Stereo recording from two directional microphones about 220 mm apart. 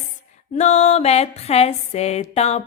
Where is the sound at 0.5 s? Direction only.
30° left (ahead or behind).